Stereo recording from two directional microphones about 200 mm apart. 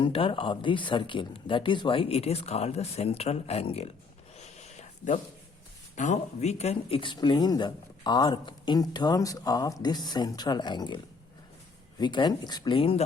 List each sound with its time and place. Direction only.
0.0 s speech: 25° left (ahead or behind)
4.4 s a sound: 35° left (ahead or behind)
6.0 s speech: 35° left (ahead or behind)